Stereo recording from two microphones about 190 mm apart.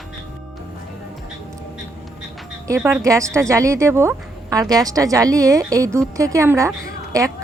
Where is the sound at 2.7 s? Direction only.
10° right (ahead or behind).